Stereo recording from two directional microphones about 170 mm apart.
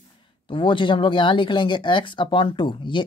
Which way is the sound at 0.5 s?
30° left (ahead or behind).